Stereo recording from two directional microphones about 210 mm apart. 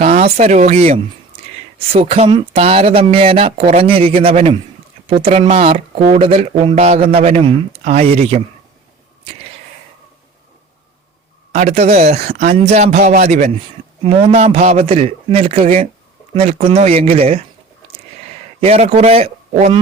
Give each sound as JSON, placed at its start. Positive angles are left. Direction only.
{"t": 0.3, "sound": "speech", "side_deg": -30}
{"t": 11.5, "sound": "speech", "side_deg": -30}
{"t": 18.6, "sound": "speech", "side_deg": -30}